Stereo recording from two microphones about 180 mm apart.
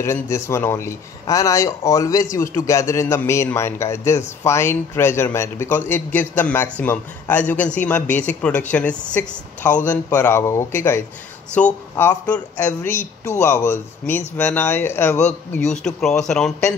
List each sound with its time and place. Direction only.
0.0 s a man's voice: 15° left (ahead or behind)
15.8 s speech: centre (ahead or behind)